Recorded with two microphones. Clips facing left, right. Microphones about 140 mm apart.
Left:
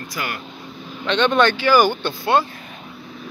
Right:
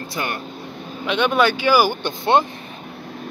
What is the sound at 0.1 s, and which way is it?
Speech, 25° right (ahead or behind).